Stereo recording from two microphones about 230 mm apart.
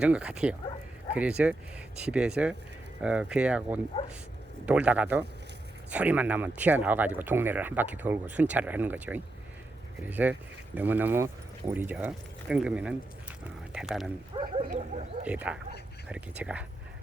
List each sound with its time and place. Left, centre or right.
0.0 s speech: centre
14.3 s speech: right
15.2 s speech: centre